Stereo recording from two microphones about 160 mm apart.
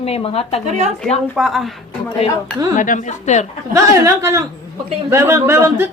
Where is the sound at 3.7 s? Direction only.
20° right (ahead or behind).